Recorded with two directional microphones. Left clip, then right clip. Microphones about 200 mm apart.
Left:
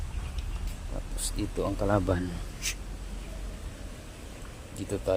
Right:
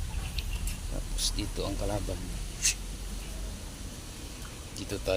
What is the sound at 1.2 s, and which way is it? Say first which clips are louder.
Speech: even; 30° left (ahead or behind).